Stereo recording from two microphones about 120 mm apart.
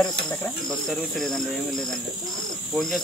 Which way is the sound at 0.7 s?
5° left (ahead or behind).